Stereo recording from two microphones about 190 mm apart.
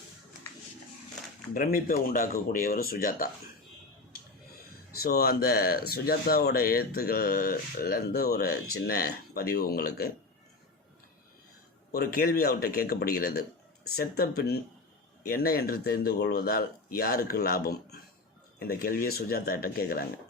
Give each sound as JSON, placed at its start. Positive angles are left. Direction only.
{"t": 1.5, "sound": "speech", "side_deg": 50}
{"t": 5.0, "sound": "speech", "side_deg": 50}
{"t": 11.9, "sound": "speech", "side_deg": 50}